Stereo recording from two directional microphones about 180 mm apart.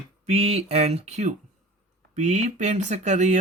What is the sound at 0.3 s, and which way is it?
Speech, 35° right (ahead or behind).